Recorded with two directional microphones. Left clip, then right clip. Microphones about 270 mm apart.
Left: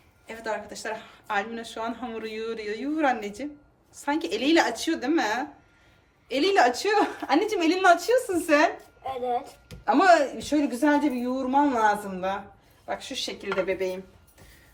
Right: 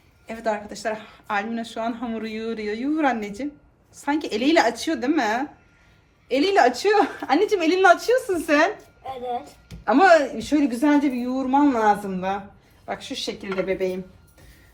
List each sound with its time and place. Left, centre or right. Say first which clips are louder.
0.3 s a woman's voice: right 5 dB; centre
9.8 s a woman's voice: right 3 dB; right